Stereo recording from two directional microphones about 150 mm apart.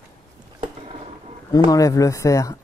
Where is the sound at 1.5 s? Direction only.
25° left (ahead or behind).